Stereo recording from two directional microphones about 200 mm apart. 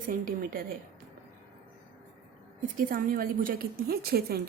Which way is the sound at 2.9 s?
45° right (ahead or behind).